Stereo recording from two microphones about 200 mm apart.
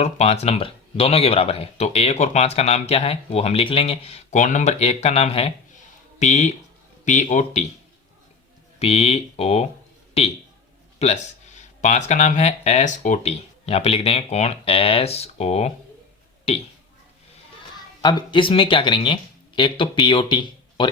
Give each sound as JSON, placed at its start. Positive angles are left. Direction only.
{"t": 0.0, "sound": "speech", "side_deg": 30}
{"t": 8.8, "sound": "speech", "side_deg": 30}
{"t": 18.0, "sound": "speech", "side_deg": 20}